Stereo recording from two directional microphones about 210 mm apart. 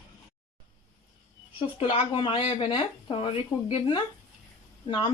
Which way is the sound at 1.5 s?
25° left (ahead or behind).